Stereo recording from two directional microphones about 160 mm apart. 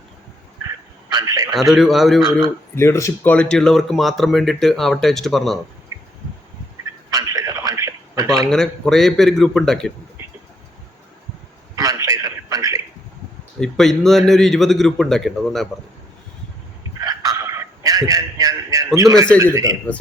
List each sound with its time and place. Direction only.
1.1 s a man's voice: 20° right (ahead or behind)
1.7 s speech: centre (ahead or behind)
2.7 s speech: 20° left (ahead or behind)
3.3 s speech: 5° left (ahead or behind)
5.9 s a sound: 20° right (ahead or behind)
7.1 s a sound: 20° right (ahead or behind)
8.4 s speech: 5° left (ahead or behind)
11.7 s a sound: 20° right (ahead or behind)
13.6 s speech: centre (ahead or behind)
17.0 s a sound: 20° right (ahead or behind)
18.9 s a man's voice: 20° right (ahead or behind)
19.9 s speech: 10° left (ahead or behind)